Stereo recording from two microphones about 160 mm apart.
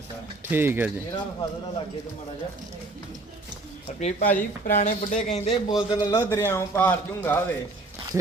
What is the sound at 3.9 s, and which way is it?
Speech, 45° left (ahead or behind).